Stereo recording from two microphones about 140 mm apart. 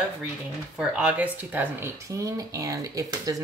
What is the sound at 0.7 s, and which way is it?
Speech, 5° right (ahead or behind).